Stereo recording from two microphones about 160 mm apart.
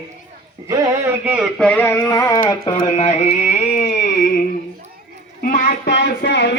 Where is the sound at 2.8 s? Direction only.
40° left (ahead or behind).